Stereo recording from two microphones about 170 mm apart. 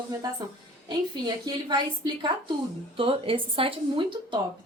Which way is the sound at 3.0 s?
30° right (ahead or behind).